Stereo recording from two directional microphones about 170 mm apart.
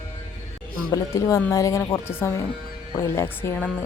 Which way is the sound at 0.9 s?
20° left (ahead or behind).